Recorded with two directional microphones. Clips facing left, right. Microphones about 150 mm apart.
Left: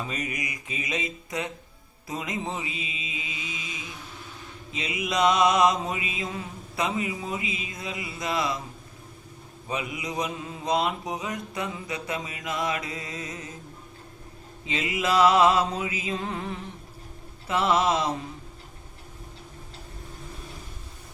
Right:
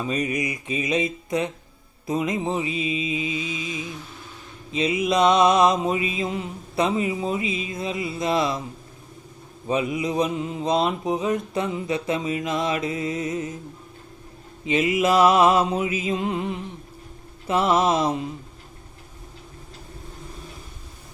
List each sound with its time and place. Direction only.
0.1 s mantra: 25° right (ahead or behind)
2.0 s mantra: 25° right (ahead or behind)
7.4 s music: 20° left (ahead or behind)
7.7 s mantra: 25° right (ahead or behind)
9.6 s mantra: 25° right (ahead or behind)
14.7 s mantra: 20° right (ahead or behind)